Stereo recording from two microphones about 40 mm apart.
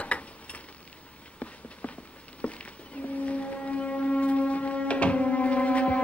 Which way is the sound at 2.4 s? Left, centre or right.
Left.